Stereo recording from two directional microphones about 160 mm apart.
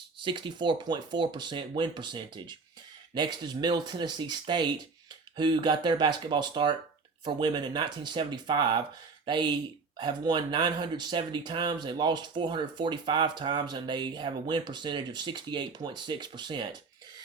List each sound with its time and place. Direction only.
0.2 s speech: 30° right (ahead or behind)